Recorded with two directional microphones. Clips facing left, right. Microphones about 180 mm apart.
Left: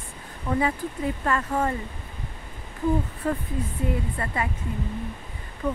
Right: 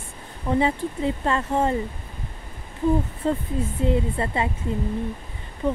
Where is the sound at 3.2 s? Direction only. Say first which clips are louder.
Right 3 dB; 25° right (ahead or behind).